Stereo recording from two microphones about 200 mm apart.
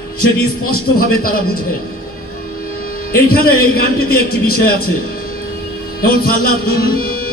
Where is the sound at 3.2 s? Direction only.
50° left (ahead or behind).